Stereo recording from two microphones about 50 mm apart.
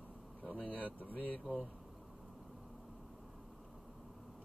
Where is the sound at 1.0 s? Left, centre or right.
Left.